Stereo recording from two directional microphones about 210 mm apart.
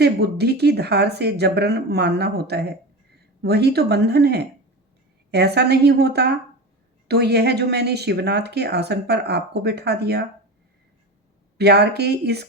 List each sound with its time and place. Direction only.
0.0 s speech: 50° right (ahead or behind)
11.5 s speech: 50° right (ahead or behind)